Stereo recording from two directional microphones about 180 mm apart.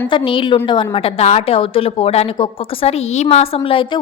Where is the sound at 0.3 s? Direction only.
30° left (ahead or behind).